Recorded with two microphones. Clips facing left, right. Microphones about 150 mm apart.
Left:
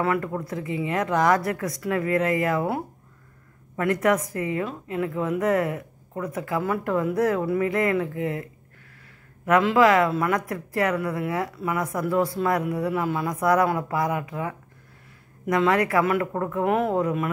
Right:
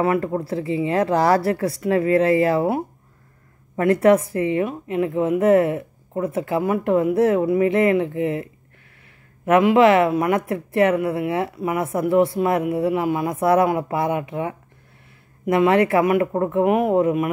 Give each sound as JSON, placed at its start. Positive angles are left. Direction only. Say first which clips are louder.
{"t": 0.0, "sound": "a woman's voice", "louder": "right 5 dB", "side_deg": -25}
{"t": 9.5, "sound": "speech", "louder": "right 4 dB", "side_deg": -20}